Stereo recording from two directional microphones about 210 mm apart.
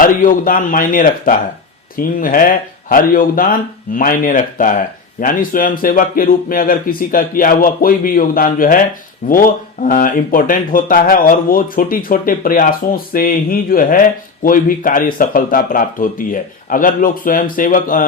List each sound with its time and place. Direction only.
0.0 s a man's voice: 40° left (ahead or behind)